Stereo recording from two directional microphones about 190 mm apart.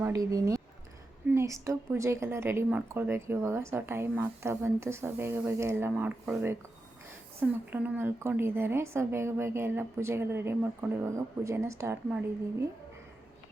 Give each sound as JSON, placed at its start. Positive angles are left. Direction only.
{"t": 0.0, "sound": "a woman's voice", "side_deg": -15}
{"t": 7.7, "sound": "a woman's voice", "side_deg": -10}